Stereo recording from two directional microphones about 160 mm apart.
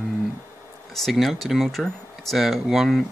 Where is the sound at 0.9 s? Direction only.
Centre (ahead or behind).